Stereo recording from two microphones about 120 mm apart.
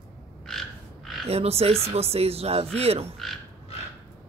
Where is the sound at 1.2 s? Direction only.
60° right (ahead or behind).